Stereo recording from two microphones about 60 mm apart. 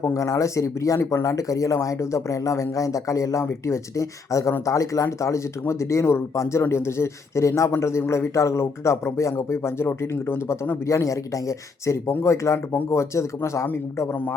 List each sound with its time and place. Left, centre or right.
0.0 s a man's voice: left
10.8 s a man's voice: left